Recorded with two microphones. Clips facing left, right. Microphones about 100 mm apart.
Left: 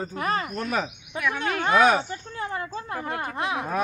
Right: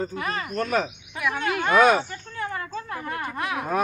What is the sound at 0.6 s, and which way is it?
Cricket, 5° left (ahead or behind).